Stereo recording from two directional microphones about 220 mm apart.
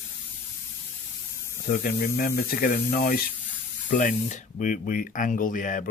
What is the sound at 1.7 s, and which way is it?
Speech, 40° left (ahead or behind).